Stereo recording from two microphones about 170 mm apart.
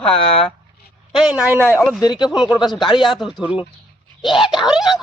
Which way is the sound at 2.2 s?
25° left (ahead or behind).